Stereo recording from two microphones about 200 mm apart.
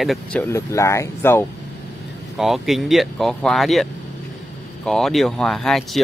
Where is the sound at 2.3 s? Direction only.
Centre (ahead or behind).